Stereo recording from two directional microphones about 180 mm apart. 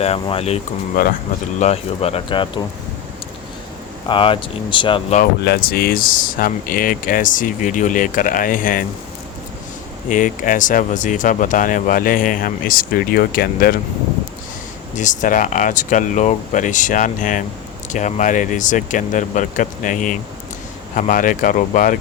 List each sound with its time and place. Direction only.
0.0 s speech: 35° left (ahead or behind)
4.1 s speech: 30° left (ahead or behind)
5.5 s speech: 55° left (ahead or behind)
10.1 s speech: 45° left (ahead or behind)
14.9 s speech: 45° left (ahead or behind)